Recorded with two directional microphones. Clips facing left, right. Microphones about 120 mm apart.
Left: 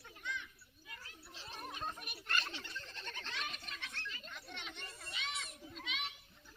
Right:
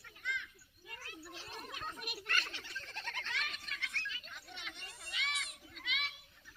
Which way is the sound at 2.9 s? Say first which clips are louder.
Right 3 dB; 80° right.